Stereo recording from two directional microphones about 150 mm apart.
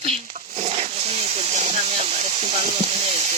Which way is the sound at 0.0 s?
45° right (ahead or behind).